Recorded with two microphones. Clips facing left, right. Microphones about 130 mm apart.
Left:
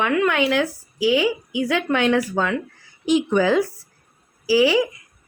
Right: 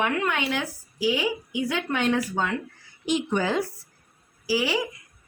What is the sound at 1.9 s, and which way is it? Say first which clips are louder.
Speech: left 5 dB; 90° left.